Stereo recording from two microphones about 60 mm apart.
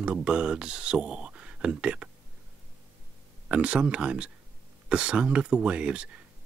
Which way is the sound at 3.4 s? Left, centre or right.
Right.